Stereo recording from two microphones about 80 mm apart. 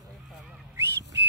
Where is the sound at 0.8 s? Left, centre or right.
Right.